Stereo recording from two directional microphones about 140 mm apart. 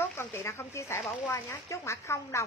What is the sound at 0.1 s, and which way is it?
Speech, 20° left (ahead or behind).